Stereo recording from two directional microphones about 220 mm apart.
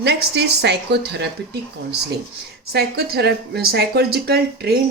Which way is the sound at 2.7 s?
45° right (ahead or behind).